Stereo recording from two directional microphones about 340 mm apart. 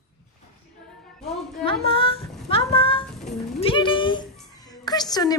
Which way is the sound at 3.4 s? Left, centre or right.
Centre.